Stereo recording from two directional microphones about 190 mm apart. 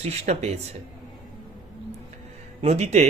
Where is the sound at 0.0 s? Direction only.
35° right (ahead or behind).